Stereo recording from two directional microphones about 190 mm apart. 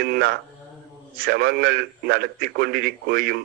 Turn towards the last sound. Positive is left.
turn(degrees=-55)  # may be behind; listen again after turning